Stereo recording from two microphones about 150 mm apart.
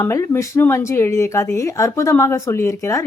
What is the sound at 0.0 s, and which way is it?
A woman's voice, 20° left (ahead or behind).